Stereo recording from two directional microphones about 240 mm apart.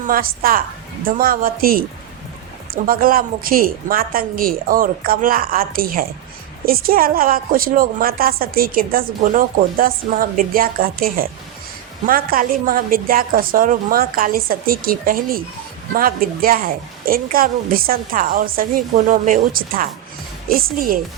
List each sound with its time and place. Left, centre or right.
0.1 s a woman's voice: right
2.8 s a woman's voice: right